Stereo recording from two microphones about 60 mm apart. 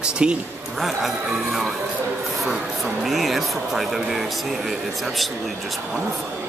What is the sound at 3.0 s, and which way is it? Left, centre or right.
Speech, centre.